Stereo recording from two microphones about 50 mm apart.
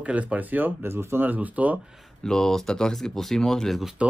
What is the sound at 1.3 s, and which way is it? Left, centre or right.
Speech, right.